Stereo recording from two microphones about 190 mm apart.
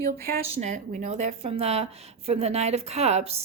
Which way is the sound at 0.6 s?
40° right (ahead or behind).